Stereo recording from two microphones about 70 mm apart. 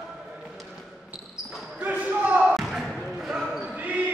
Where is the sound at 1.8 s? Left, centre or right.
Right.